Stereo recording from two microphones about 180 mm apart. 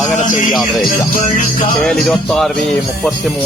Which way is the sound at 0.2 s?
45° left (ahead or behind).